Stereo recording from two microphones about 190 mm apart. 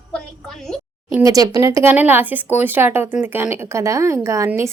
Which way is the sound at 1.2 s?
20° right (ahead or behind).